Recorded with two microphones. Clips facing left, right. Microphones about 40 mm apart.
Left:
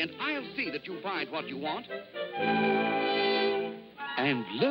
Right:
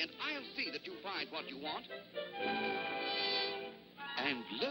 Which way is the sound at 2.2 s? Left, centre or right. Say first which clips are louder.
Left 10 dB; left.